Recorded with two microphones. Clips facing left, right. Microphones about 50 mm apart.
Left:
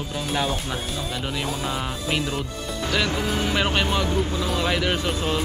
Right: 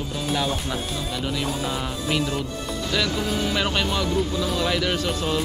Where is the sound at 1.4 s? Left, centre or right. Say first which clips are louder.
Even; centre.